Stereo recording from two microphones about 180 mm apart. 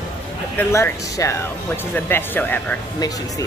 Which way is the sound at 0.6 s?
15° left (ahead or behind).